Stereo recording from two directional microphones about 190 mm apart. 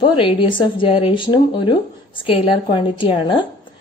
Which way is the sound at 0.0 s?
25° left (ahead or behind).